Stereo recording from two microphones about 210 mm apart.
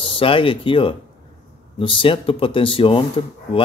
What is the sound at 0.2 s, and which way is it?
Speech, 25° left (ahead or behind).